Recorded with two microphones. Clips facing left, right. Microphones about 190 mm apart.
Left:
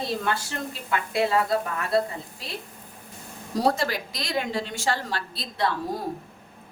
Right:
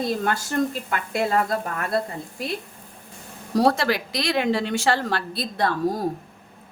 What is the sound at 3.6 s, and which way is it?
A woman's voice, 75° right (ahead or behind).